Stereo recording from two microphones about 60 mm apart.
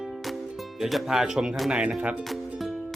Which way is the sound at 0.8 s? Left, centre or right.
Centre.